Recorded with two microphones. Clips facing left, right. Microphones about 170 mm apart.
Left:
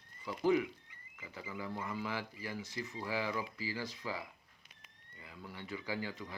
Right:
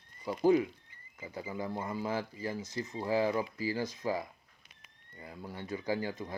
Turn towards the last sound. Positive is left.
turn(degrees=-40)  # may be behind; listen again after turning